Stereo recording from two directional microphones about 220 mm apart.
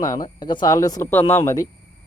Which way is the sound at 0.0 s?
15° left (ahead or behind).